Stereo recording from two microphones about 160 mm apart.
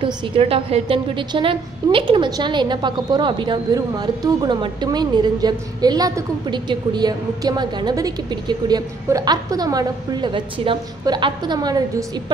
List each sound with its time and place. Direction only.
0.0 s a woman's voice: 35° right (ahead or behind)